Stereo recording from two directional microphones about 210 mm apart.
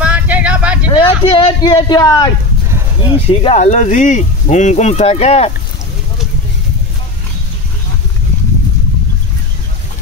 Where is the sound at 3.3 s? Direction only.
30° left (ahead or behind).